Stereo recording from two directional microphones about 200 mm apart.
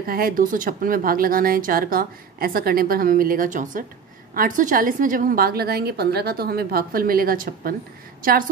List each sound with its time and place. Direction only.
0.0 s a woman's voice: 45° right (ahead or behind)